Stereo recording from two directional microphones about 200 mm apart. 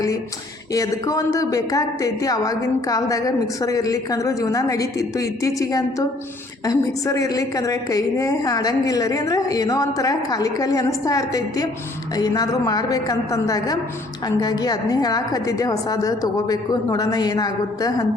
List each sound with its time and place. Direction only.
0.7 s a woman's voice: 15° left (ahead or behind)